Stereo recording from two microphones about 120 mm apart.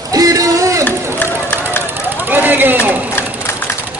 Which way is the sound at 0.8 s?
20° left (ahead or behind).